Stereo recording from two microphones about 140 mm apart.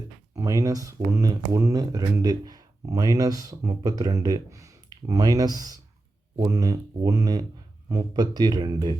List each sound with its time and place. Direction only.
0.3 s speech: 25° right (ahead or behind)